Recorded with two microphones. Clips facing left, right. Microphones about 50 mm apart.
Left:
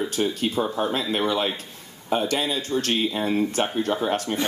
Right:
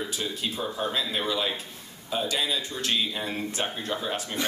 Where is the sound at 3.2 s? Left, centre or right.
Left.